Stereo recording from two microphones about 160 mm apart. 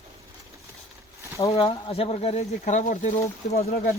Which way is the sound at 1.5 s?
35° left (ahead or behind).